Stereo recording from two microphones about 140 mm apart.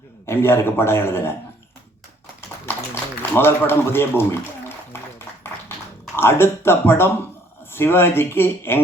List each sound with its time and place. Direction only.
0.3 s speech: 15° left (ahead or behind)
2.6 s speech: 15° left (ahead or behind)
6.1 s speech: 15° left (ahead or behind)